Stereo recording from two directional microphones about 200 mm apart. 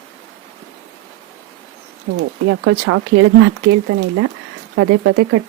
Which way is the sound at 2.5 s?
90° right.